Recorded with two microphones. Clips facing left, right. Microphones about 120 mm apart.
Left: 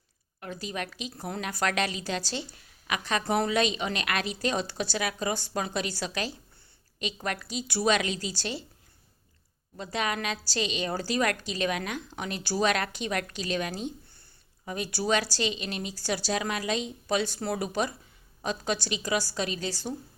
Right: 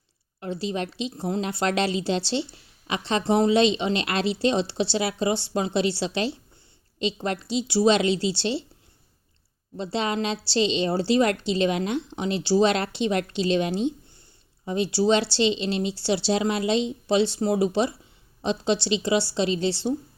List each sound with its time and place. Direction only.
0.3 s a woman's voice: 25° right (ahead or behind)
9.7 s a woman's voice: 30° right (ahead or behind)